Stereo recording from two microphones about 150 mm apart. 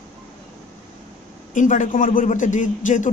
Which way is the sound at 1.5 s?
60° left (ahead or behind).